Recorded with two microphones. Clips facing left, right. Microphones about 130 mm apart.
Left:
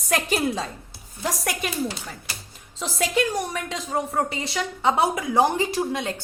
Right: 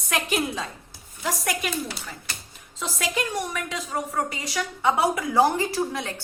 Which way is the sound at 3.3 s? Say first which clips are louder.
Left 2 dB; 35° left (ahead or behind).